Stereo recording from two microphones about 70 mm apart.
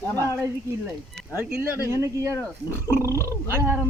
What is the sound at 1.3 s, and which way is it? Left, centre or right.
Speech, right.